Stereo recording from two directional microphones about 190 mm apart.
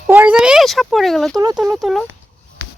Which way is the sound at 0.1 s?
10° right (ahead or behind).